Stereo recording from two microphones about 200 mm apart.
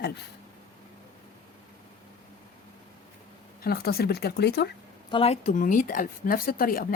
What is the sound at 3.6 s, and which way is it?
Speech, 50° left (ahead or behind).